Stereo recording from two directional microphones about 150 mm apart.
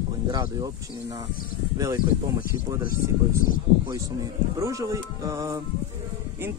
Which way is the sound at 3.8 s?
20° right (ahead or behind).